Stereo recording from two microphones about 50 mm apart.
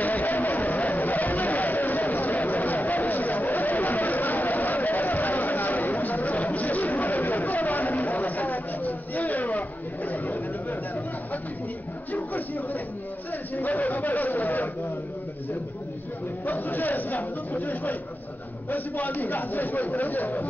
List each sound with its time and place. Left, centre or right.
0.0 s a sound: left
12.1 s music: left
13.6 s a man's voice: left
16.4 s speech: left